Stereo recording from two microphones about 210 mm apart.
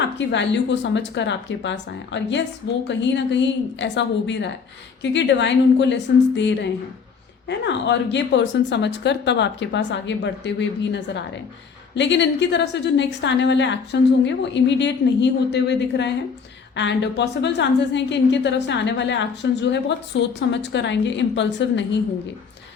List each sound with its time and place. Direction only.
0.3 s a woman's voice: 55° left (ahead or behind)